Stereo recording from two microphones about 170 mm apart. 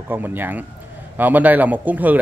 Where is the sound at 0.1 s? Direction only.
10° right (ahead or behind).